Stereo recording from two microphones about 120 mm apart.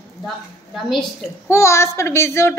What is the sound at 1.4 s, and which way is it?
A child's voice, 25° left (ahead or behind).